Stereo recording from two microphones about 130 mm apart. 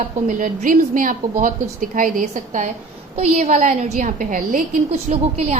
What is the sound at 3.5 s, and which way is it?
A woman's voice, 75° right (ahead or behind).